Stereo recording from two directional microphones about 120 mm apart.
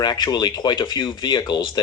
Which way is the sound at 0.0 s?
35° left (ahead or behind).